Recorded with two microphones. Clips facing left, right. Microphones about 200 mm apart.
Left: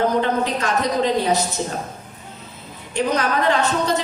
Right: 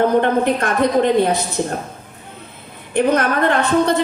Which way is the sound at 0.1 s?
55° right (ahead or behind).